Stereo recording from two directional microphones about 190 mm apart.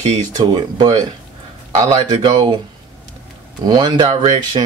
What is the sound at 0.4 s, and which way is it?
Speech, 20° right (ahead or behind).